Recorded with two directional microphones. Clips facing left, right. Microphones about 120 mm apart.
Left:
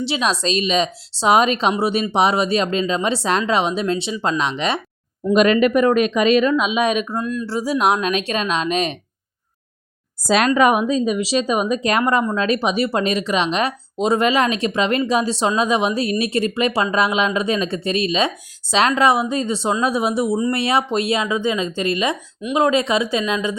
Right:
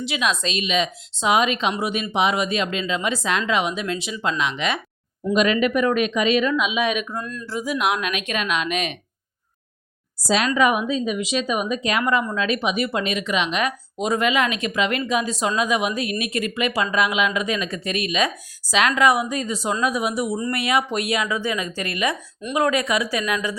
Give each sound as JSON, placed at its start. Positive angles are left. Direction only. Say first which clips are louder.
{"t": 0.0, "sound": "speech", "louder": "left 3 dB", "side_deg": 30}
{"t": 5.3, "sound": "speech", "louder": "left 5 dB", "side_deg": 45}
{"t": 7.2, "sound": "speech", "louder": "left 7 dB", "side_deg": 10}
{"t": 7.4, "sound": "speech", "louder": "left 4 dB", "side_deg": 30}
{"t": 10.2, "sound": "speech", "louder": "left 4 dB", "side_deg": 50}